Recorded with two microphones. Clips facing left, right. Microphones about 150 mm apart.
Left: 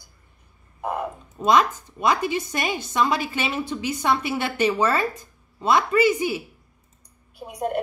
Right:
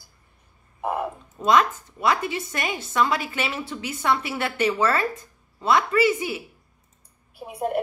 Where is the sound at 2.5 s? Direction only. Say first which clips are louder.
Left 2 dB; 15° left (ahead or behind).